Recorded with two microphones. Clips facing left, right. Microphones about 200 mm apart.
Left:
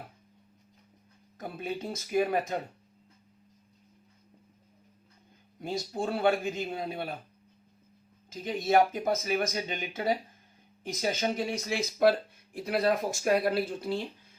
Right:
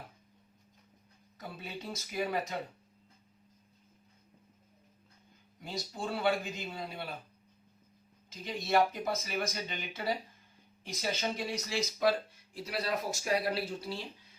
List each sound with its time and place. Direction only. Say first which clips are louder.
1.4 s speech: left 8 dB; 50° left (ahead or behind)
5.5 s a man's voice: left 7 dB; 50° left (ahead or behind)
8.6 s a man's voice: left 4 dB; 50° left (ahead or behind)